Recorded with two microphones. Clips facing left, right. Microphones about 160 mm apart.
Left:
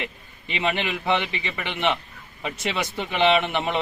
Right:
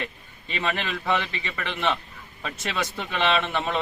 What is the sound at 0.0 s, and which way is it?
Speech, 15° left (ahead or behind).